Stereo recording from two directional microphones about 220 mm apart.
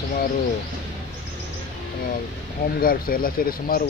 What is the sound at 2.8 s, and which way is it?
Speech, 40° left (ahead or behind).